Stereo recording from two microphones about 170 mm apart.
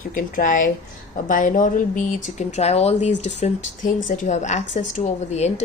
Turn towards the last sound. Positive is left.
turn(degrees=40)  # may be behind; listen again after turning